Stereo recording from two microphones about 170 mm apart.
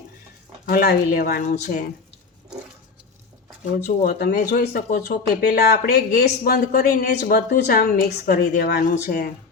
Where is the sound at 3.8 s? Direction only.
65° left (ahead or behind).